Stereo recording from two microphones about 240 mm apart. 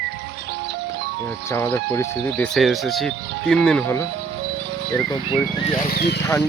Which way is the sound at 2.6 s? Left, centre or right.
Centre.